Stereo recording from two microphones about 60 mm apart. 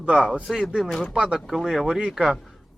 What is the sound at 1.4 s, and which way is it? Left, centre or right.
Speech, centre.